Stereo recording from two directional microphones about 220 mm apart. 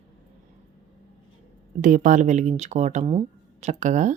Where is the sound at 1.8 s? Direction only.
35° right (ahead or behind).